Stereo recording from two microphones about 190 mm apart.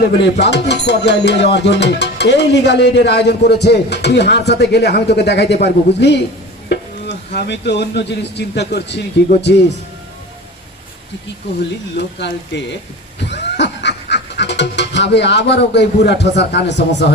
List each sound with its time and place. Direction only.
0.0 s speech: 65° left (ahead or behind)
7.3 s speech: 65° left (ahead or behind)
12.5 s speech: 65° left (ahead or behind)
13.2 s music: 65° left (ahead or behind)